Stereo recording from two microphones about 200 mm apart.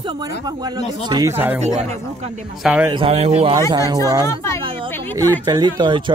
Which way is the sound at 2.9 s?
25° right (ahead or behind).